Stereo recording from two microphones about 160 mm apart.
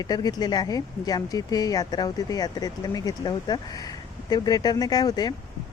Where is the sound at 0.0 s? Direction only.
25° left (ahead or behind).